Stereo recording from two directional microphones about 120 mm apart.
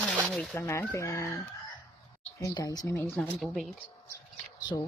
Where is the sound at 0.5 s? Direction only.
20° left (ahead or behind).